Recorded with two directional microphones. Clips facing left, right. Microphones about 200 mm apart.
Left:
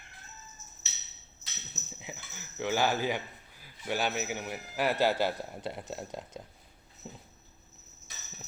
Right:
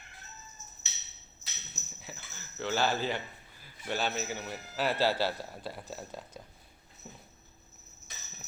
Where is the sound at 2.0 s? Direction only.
15° left (ahead or behind).